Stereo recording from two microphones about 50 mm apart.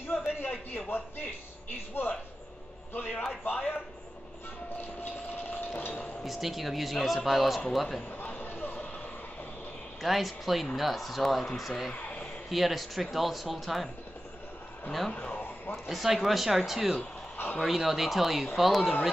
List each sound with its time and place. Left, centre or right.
0.0 s a sound: left
2.9 s a man's voice: left
3.4 s a man's voice: left
5.8 s chink: left
6.2 s speech: centre
8.2 s a sound: left
10.0 s speech: centre
11.9 s a sound: left
12.4 s speech: centre
14.9 s speech: centre
15.1 s a sound: left
15.7 s speech: centre